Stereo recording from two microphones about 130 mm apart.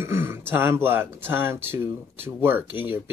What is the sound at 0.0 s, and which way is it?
Speech, 20° right (ahead or behind).